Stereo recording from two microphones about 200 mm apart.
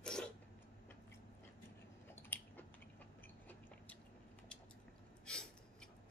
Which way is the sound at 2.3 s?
10° left (ahead or behind).